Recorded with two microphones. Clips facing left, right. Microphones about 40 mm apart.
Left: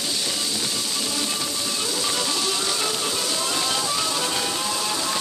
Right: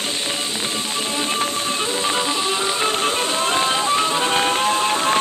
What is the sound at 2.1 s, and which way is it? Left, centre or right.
Music, right.